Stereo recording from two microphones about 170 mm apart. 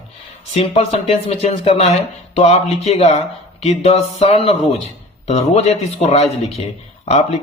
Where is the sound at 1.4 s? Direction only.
35° left (ahead or behind).